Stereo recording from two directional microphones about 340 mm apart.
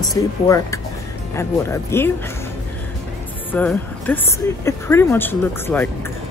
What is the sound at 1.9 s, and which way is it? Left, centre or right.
Speech, centre.